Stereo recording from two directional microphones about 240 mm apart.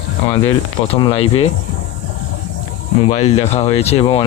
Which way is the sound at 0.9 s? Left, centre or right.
Left.